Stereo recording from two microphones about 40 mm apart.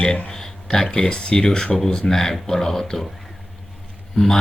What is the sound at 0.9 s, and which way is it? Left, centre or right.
A man's voice, centre.